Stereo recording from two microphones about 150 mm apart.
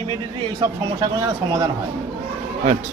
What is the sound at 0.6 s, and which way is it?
Speech, 25° right (ahead or behind).